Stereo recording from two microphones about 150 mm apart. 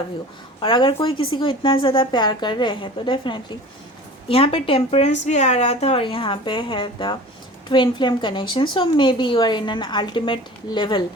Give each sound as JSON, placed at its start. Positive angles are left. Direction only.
{"t": 0.6, "sound": "a woman's voice", "side_deg": 35}